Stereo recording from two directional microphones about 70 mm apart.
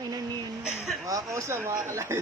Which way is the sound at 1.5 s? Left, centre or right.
Right.